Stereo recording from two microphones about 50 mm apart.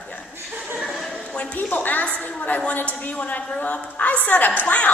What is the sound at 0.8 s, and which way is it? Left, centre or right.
Speech, centre.